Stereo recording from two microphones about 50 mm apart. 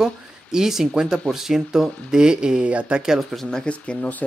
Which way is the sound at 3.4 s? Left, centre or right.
Centre.